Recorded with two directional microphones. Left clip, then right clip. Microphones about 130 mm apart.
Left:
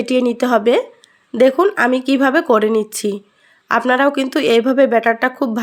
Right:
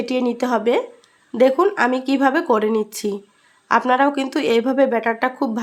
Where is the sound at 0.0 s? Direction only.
25° left (ahead or behind).